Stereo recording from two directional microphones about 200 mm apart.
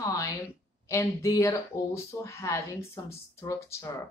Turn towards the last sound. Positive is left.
turn(degrees=15)  # may be behind; listen again after turning